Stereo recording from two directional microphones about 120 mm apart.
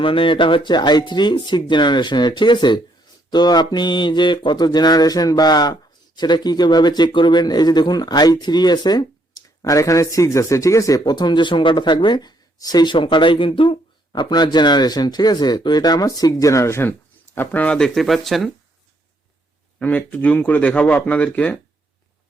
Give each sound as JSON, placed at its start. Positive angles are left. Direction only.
{"t": 0.0, "sound": "mantra", "side_deg": 45}
{"t": 17.3, "sound": "speech", "side_deg": 15}
{"t": 19.8, "sound": "speech", "side_deg": 15}